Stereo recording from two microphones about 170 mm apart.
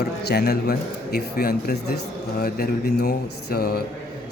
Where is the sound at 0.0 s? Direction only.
70° left (ahead or behind).